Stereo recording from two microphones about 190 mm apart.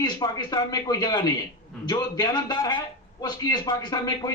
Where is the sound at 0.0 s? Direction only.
20° left (ahead or behind).